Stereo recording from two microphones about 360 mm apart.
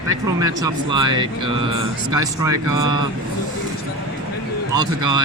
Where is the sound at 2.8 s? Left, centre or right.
Left.